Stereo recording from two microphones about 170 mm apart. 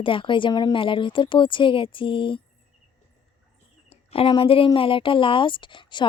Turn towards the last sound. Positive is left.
turn(degrees=30)  # may be behind; listen again after turning